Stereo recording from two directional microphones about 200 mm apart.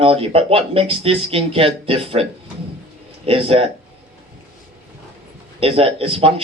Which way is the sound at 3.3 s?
30° right (ahead or behind).